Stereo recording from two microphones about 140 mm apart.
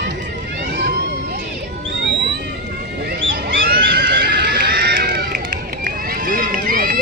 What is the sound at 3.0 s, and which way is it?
Neigh, 90° right.